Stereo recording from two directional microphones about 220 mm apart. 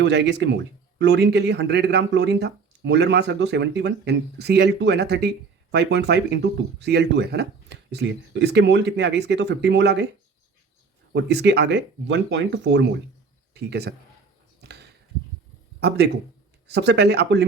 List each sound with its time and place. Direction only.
0.0 s speech: 50° right (ahead or behind)
11.1 s speech: 50° right (ahead or behind)
14.6 s a sound: 50° right (ahead or behind)
16.6 s speech: 50° right (ahead or behind)